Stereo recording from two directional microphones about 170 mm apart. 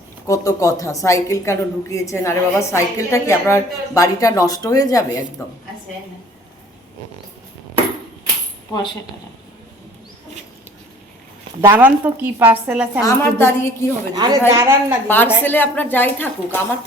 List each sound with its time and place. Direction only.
0.3 s a woman's voice: 20° left (ahead or behind)
11.6 s a woman's voice: 15° right (ahead or behind)
13.0 s a woman's voice: 15° left (ahead or behind)
14.2 s a woman's voice: 20° right (ahead or behind)
15.0 s a woman's voice: 10° left (ahead or behind)